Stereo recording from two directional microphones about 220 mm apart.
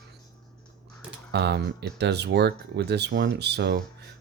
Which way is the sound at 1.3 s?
50° right (ahead or behind).